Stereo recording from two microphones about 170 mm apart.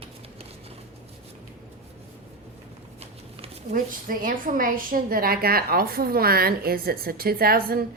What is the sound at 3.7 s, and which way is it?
A woman's voice, 55° right (ahead or behind).